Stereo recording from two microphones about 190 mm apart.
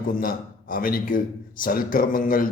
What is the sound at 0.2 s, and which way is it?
A man's voice, 50° left (ahead or behind).